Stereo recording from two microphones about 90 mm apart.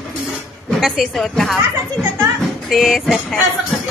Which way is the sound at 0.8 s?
Centre (ahead or behind).